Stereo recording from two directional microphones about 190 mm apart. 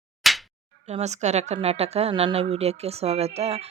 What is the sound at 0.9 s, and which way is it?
Speech, 35° right (ahead or behind).